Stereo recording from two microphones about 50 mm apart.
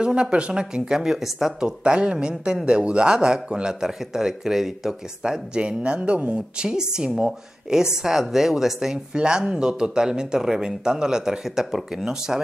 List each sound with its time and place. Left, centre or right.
0.0 s speech: right
1.8 s speech: right
6.6 s speech: centre
8.9 s speech: centre